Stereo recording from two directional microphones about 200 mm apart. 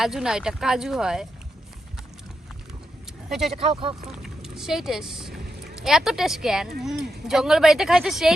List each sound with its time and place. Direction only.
0.0 s speech: 5° right (ahead or behind)
3.2 s speech: centre (ahead or behind)
3.5 s speech: 25° right (ahead or behind)
4.2 s speech: centre (ahead or behind)